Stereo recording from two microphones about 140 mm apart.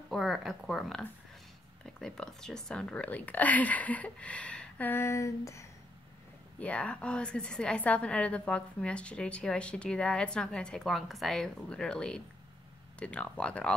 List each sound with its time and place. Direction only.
0.1 s a woman's voice: centre (ahead or behind); by 5.7 s 20° left (ahead or behind)
6.6 s a woman's voice: 10° left (ahead or behind)